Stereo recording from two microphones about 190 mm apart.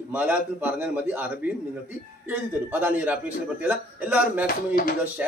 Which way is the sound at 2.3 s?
10° right (ahead or behind).